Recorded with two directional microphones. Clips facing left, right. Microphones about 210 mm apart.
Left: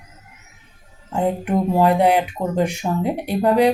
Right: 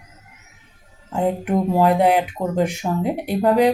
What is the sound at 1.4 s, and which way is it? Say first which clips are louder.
Speech: even; 45° right (ahead or behind).